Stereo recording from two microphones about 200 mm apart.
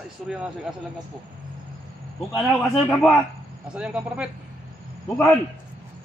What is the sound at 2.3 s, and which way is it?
A man's voice, centre (ahead or behind).